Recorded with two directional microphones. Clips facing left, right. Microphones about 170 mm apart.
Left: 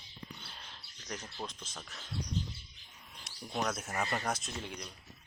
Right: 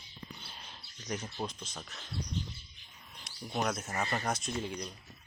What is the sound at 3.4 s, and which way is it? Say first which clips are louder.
Speech: right 2 dB; 5° right (ahead or behind).